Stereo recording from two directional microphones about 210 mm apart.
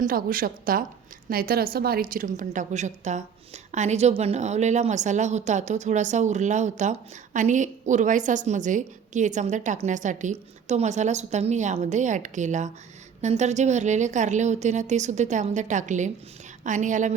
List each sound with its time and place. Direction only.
0.0 s a woman's voice: 45° right (ahead or behind)